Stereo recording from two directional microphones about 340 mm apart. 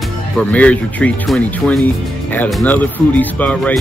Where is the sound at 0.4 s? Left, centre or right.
Centre.